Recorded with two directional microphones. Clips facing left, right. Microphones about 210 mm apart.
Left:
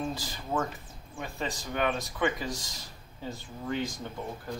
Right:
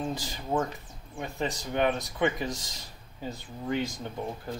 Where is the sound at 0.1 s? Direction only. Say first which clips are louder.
Right 3 dB; 20° right (ahead or behind).